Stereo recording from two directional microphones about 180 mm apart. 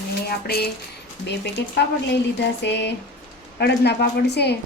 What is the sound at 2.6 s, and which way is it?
A man's voice, 75° left (ahead or behind).